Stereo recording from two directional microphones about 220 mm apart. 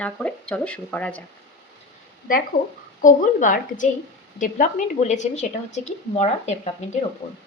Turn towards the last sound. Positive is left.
turn(degrees=30)  # may be behind; listen again after turning